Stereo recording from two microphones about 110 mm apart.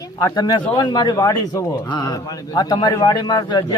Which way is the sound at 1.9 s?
40° left (ahead or behind).